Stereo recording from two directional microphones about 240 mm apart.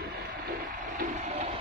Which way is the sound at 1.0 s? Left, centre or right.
Right.